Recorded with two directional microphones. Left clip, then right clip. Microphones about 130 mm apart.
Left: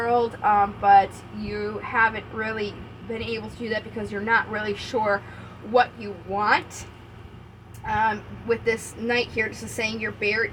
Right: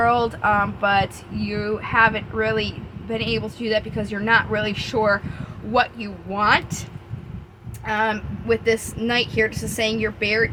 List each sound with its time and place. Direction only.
0.1 s a woman's voice: 60° right (ahead or behind)
6.3 s a woman's voice: 55° right (ahead or behind)
7.9 s speech: 70° right (ahead or behind); by 10.4 s 55° right (ahead or behind)